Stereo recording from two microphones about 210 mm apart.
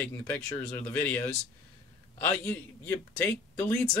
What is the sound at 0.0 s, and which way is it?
Speech, 5° left (ahead or behind).